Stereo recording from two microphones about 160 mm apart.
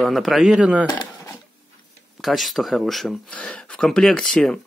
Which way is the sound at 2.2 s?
Centre (ahead or behind).